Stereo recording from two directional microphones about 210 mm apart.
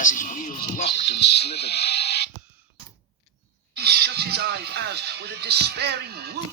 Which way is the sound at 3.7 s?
50° right (ahead or behind).